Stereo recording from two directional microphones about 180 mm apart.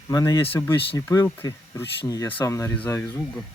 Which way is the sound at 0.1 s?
20° left (ahead or behind).